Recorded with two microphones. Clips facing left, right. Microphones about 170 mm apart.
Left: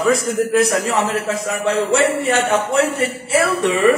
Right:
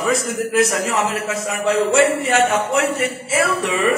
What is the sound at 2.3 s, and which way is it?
Speech, 35° left (ahead or behind).